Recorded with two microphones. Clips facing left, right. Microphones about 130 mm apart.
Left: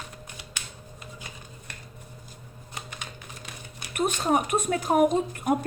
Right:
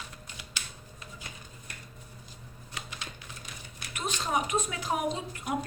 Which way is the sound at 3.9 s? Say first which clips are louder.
Left 7 dB; 55° left (ahead or behind).